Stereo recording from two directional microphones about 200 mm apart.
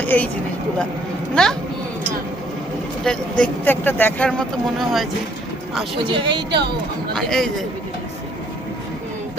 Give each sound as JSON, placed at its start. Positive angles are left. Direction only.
{"t": 0.0, "sound": "speech", "side_deg": 10}
{"t": 1.4, "sound": "speech", "side_deg": 5}
{"t": 3.0, "sound": "speech", "side_deg": 5}
{"t": 6.1, "sound": "a woman's voice", "side_deg": -25}
{"t": 7.1, "sound": "speech", "side_deg": 0}